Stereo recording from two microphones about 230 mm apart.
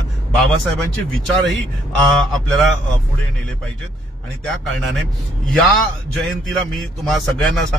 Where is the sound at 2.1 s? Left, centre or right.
Centre.